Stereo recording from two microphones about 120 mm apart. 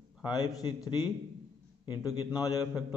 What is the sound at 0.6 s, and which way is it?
Speech, 40° left (ahead or behind).